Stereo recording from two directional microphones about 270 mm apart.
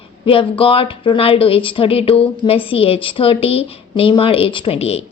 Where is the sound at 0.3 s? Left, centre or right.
Centre.